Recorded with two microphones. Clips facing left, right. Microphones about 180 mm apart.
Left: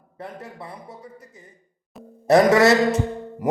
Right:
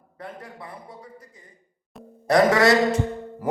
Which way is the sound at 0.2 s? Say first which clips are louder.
Left 2 dB; 25° left (ahead or behind).